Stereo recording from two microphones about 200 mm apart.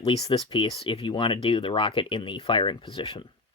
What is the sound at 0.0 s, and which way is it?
Speech, 25° left (ahead or behind).